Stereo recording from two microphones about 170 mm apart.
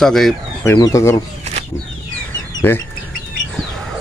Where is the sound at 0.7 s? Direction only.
20° left (ahead or behind).